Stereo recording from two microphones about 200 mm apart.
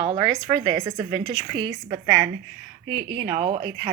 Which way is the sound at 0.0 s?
30° right (ahead or behind).